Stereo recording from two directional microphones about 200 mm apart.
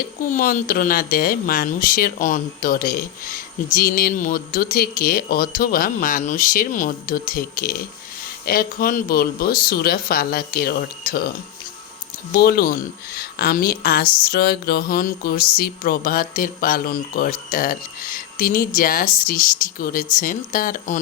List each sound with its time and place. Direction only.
0.2 s speech: 45° left (ahead or behind)
12.3 s speech: 50° left (ahead or behind)